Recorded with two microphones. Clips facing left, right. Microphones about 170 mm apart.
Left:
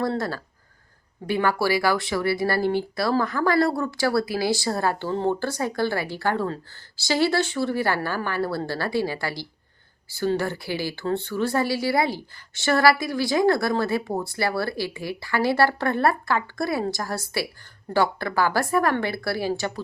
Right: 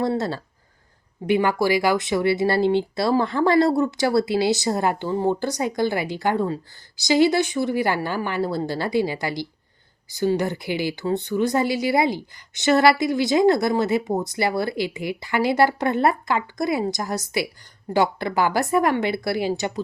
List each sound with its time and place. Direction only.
0.2 s speech: 25° right (ahead or behind)